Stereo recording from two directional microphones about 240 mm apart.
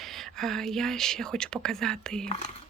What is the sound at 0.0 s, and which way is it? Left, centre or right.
Speech, centre.